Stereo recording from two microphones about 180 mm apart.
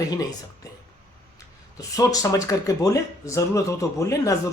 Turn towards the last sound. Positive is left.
turn(degrees=15)  # may be behind; listen again after turning